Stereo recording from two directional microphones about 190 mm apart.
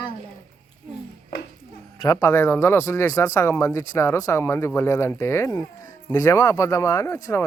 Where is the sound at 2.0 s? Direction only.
15° left (ahead or behind).